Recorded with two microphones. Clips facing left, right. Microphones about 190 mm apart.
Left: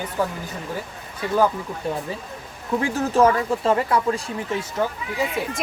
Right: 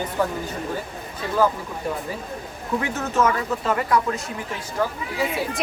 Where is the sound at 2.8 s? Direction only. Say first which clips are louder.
Left 4 dB; 30° left (ahead or behind).